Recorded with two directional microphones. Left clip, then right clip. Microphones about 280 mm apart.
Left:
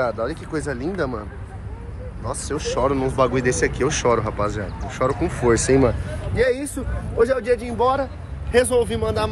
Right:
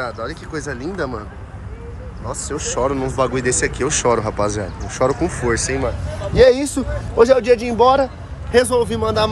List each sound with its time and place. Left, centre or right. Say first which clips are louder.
0.0 s speech: left 3 dB; centre
2.2 s speech: right 1 dB; centre
5.4 s speech: left 2 dB; centre
6.3 s speech: right 9 dB; centre